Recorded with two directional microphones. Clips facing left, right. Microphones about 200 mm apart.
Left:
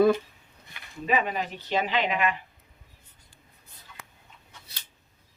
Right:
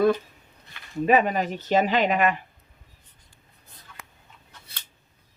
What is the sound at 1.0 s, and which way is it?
Speech, 50° right (ahead or behind).